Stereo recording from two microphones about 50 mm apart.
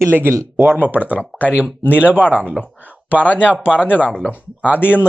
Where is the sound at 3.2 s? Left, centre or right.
Left.